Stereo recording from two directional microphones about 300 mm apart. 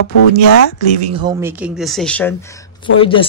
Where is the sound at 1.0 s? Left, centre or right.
Centre.